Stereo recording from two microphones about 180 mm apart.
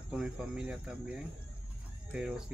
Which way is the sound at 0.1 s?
5° right (ahead or behind).